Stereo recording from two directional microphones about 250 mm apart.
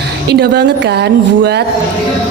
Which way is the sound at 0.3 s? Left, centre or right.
Right.